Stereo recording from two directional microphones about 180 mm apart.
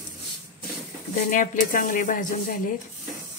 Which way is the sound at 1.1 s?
45° left (ahead or behind).